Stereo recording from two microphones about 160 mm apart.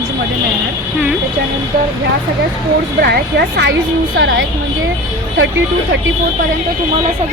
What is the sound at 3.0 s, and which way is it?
Speech, 90° right.